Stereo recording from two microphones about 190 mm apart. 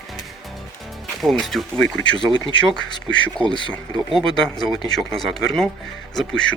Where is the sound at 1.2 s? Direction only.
Centre (ahead or behind).